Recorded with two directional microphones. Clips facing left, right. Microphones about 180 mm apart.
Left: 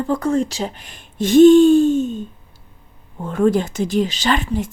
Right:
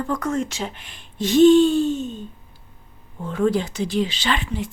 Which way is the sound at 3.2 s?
50° left (ahead or behind).